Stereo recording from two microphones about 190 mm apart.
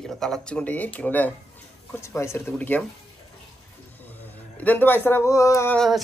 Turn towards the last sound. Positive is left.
turn(degrees=0)  # may be behind; listen again after turning